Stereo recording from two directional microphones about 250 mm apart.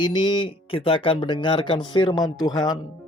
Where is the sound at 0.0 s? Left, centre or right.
Centre.